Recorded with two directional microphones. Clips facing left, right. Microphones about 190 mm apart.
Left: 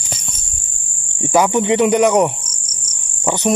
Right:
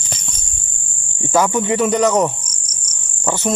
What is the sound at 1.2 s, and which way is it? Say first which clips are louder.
Speech: left 2 dB; 15° left (ahead or behind).